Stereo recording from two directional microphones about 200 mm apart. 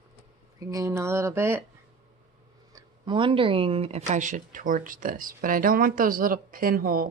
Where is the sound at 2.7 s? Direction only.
25° right (ahead or behind); by 7.1 s 45° right (ahead or behind).